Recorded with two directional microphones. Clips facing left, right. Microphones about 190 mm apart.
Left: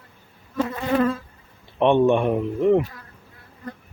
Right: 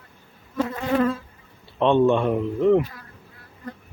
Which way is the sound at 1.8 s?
15° left (ahead or behind).